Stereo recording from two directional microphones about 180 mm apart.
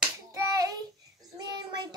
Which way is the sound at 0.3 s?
20° right (ahead or behind).